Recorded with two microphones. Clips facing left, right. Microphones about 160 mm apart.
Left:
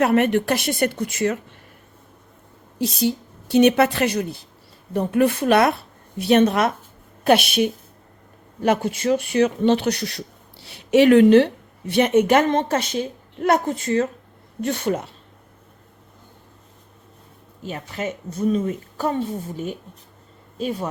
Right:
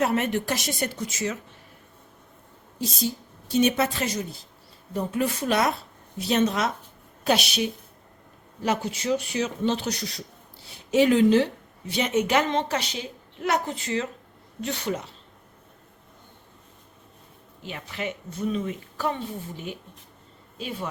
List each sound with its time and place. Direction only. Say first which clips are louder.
0.0 s speech: left 7 dB; 60° left (ahead or behind)
2.7 s a woman's voice: left 7 dB; 70° left (ahead or behind)
17.6 s speech: left 5 dB; 40° left (ahead or behind)